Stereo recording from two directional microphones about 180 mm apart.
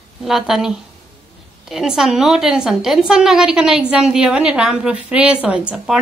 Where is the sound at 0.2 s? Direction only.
Centre (ahead or behind).